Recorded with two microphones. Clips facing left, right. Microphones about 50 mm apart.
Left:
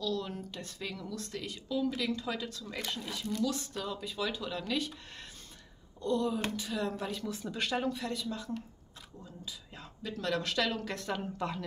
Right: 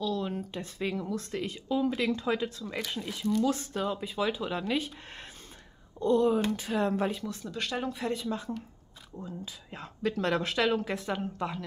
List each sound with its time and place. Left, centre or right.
0.0 s a sound: right
0.4 s speech: right
7.2 s speech: centre
7.9 s speech: right; by 11.6 s centre